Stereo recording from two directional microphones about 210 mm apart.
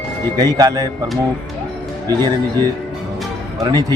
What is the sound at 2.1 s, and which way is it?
Speech, 20° right (ahead or behind).